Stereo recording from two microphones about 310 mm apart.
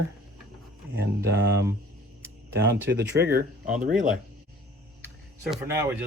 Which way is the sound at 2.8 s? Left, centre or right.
Right.